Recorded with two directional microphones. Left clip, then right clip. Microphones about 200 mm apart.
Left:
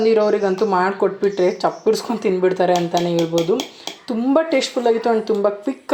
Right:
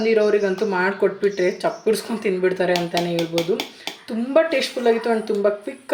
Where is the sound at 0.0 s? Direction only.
20° left (ahead or behind).